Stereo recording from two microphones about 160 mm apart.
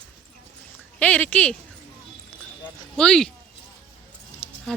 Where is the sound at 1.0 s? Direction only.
10° left (ahead or behind).